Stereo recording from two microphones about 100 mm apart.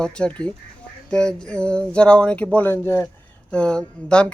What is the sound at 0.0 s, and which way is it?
Speech, 10° left (ahead or behind).